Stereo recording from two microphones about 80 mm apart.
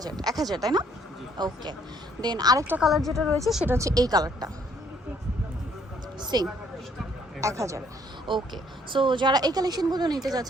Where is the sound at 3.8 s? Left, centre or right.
Right.